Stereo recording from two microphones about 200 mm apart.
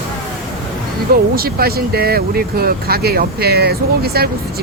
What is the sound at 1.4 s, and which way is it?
Speech, 50° right (ahead or behind).